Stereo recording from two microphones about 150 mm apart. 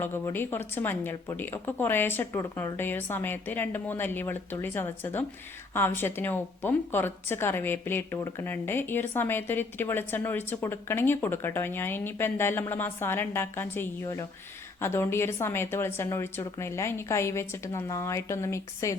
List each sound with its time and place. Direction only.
0.0 s a woman's voice: 15° left (ahead or behind)